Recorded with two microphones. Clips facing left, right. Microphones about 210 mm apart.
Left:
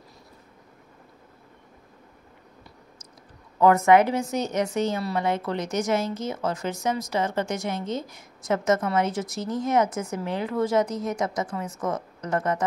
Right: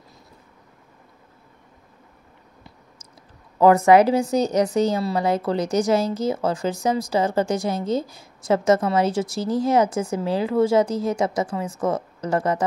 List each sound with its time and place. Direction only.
3.5 s a woman's voice: 30° right (ahead or behind)